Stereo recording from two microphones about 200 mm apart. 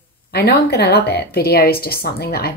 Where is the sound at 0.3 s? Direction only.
50° left (ahead or behind).